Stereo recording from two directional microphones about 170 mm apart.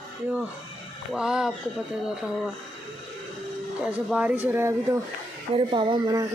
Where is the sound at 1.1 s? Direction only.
5° right (ahead or behind).